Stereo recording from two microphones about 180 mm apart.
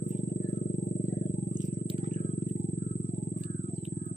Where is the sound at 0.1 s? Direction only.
45° left (ahead or behind).